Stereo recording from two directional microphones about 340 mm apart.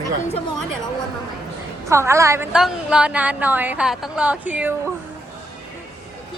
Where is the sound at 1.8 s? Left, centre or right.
Centre.